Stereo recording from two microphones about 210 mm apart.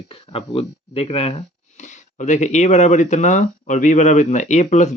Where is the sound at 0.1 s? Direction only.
25° left (ahead or behind).